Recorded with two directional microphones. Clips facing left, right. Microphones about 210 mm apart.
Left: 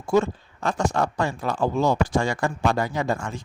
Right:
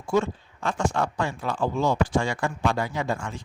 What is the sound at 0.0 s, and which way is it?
Speech, 40° left (ahead or behind).